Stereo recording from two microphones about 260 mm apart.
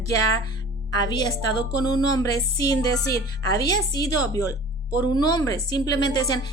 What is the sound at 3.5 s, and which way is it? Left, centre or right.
Speech, centre.